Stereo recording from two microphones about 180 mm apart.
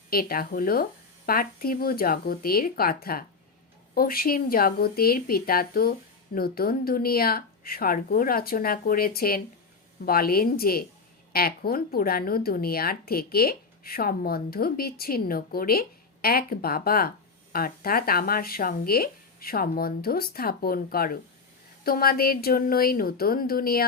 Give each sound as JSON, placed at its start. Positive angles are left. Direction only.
{"t": 0.1, "sound": "speech", "side_deg": 55}